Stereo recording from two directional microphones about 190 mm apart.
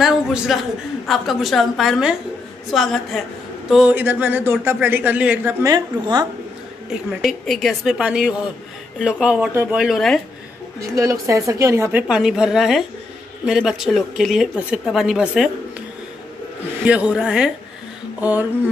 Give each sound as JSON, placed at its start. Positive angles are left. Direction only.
{"t": 0.0, "sound": "speech", "side_deg": -5}
{"t": 7.1, "sound": "speech", "side_deg": 0}
{"t": 11.0, "sound": "speech", "side_deg": -15}
{"t": 12.1, "sound": "speech", "side_deg": -5}
{"t": 16.8, "sound": "speech", "side_deg": -5}